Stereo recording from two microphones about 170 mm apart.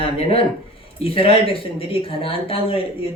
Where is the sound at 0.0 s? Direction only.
35° left (ahead or behind).